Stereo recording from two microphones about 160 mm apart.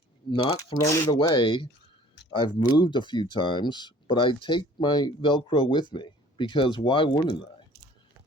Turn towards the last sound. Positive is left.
turn(degrees=30)  # may be behind; listen again after turning